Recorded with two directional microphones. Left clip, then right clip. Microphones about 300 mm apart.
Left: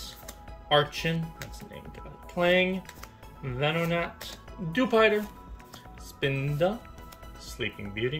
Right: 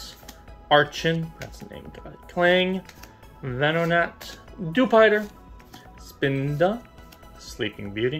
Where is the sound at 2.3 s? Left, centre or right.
Centre.